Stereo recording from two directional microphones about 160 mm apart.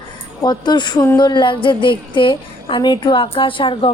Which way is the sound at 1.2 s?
30° left (ahead or behind).